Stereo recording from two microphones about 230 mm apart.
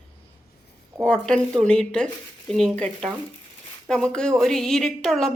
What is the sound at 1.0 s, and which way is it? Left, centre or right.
A woman's voice, centre.